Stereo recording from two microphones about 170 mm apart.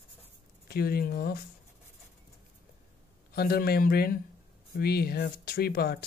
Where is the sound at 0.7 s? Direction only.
65° left (ahead or behind).